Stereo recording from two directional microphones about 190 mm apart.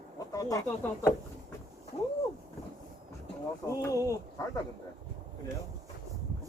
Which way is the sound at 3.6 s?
15° left (ahead or behind).